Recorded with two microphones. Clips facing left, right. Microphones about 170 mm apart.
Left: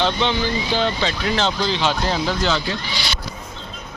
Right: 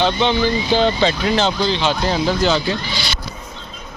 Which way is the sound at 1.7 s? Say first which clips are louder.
Right 2 dB; centre (ahead or behind).